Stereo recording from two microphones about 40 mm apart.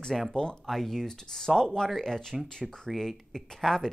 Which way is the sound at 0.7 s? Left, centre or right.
Centre.